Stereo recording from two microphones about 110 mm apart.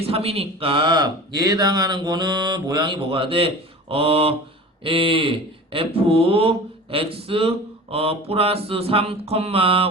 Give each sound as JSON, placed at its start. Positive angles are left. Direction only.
{"t": 0.0, "sound": "speech", "side_deg": -60}